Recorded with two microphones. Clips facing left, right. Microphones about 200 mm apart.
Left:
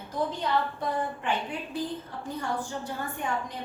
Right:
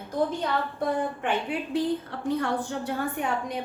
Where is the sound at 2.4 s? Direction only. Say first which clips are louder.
Right 4 dB; 65° right (ahead or behind).